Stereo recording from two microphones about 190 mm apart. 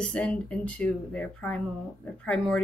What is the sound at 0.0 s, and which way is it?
Speech, 5° left (ahead or behind).